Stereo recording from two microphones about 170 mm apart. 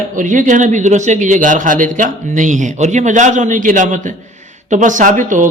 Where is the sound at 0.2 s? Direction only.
50° right (ahead or behind).